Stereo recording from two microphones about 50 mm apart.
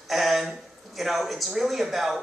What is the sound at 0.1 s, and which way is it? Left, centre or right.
Speech, centre.